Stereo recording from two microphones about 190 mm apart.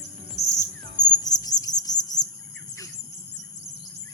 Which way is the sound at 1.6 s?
20° left (ahead or behind).